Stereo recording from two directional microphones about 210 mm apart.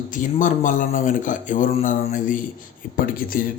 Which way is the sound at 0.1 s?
35° left (ahead or behind).